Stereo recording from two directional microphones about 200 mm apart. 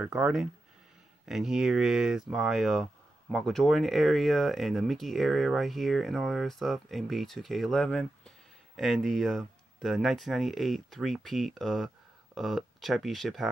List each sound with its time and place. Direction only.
0.0 s speech: 5° right (ahead or behind)